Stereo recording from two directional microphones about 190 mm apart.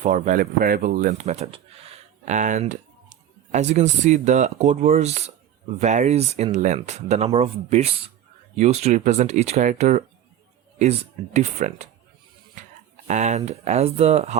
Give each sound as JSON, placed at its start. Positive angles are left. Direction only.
{"t": 0.0, "sound": "speech", "side_deg": -40}
{"t": 13.1, "sound": "speech", "side_deg": -40}